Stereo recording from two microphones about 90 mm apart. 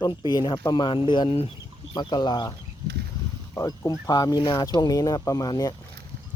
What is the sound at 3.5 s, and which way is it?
Speech, 30° left (ahead or behind).